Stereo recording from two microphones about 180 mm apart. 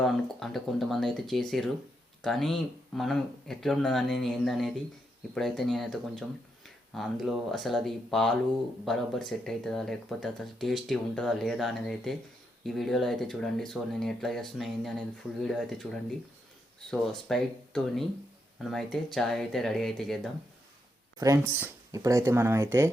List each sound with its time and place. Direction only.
0.0 s speech: centre (ahead or behind)
21.2 s speech: 15° right (ahead or behind)